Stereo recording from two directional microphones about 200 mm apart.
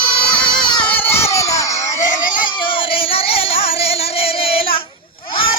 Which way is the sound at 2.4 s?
25° left (ahead or behind).